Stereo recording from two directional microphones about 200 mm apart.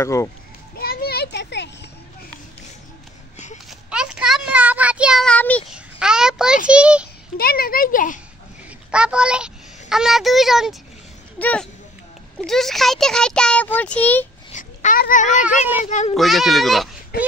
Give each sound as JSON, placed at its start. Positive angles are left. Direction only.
{"t": 0.0, "sound": "a child's voice", "side_deg": 15}
{"t": 0.7, "sound": "children playing", "side_deg": 50}
{"t": 3.9, "sound": "a sound", "side_deg": -5}
{"t": 5.7, "sound": "a child's voice", "side_deg": -5}
{"t": 7.3, "sound": "speech", "side_deg": 50}
{"t": 8.6, "sound": "a child's voice", "side_deg": -5}
{"t": 14.5, "sound": "a sound", "side_deg": 40}
{"t": 15.8, "sound": "a child's voice", "side_deg": 35}
{"t": 16.2, "sound": "a child's voice", "side_deg": 0}